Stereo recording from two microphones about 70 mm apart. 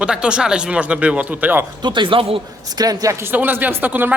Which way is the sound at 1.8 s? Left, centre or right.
Right.